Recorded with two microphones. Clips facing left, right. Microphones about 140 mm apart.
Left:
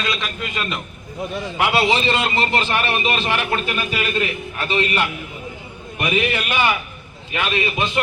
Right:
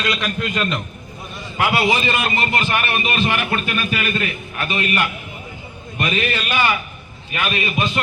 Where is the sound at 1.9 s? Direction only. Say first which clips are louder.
Left 1 dB; 25° left (ahead or behind).